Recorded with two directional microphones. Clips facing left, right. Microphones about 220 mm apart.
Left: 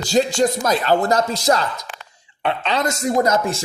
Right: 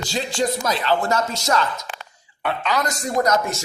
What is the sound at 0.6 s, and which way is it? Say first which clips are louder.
Speech: left 4 dB; 45° left (ahead or behind).